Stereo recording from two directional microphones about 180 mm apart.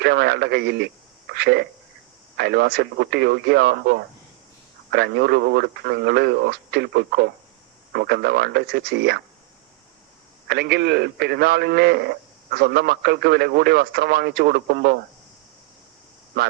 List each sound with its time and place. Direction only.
0.0 s a man's voice: 65° right (ahead or behind)
10.5 s a man's voice: 65° right (ahead or behind)
16.4 s a man's voice: 65° right (ahead or behind)